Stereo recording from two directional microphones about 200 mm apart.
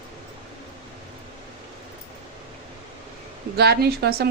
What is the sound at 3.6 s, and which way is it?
Speech, 55° right (ahead or behind).